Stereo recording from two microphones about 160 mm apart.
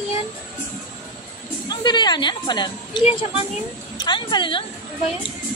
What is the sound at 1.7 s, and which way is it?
A woman's voice, 25° left (ahead or behind).